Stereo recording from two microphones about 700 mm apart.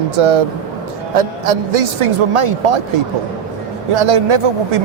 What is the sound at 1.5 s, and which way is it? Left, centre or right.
A man's voice, right.